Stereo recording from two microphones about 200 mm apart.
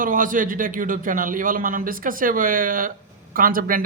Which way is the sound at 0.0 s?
45° right (ahead or behind).